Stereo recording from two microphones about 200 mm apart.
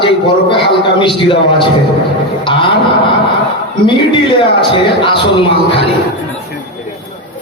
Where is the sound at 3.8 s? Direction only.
25° left (ahead or behind).